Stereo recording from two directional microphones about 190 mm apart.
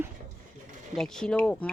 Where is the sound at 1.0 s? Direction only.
Centre (ahead or behind).